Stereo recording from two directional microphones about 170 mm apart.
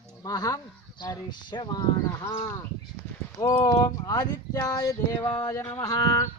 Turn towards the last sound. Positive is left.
turn(degrees=20)  # may be behind; listen again after turning